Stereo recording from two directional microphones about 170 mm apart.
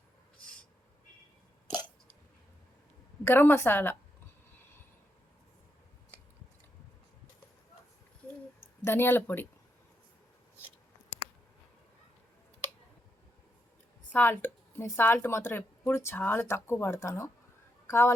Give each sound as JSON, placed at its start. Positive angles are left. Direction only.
{"t": 3.2, "sound": "speech", "side_deg": 15}
{"t": 8.8, "sound": "speech", "side_deg": 15}
{"t": 14.1, "sound": "speech", "side_deg": 10}